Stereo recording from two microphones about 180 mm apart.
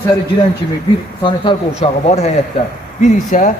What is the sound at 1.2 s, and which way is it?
A man's voice, 25° left (ahead or behind).